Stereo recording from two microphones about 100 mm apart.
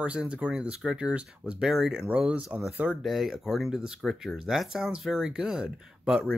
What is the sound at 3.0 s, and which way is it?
Speech, centre (ahead or behind).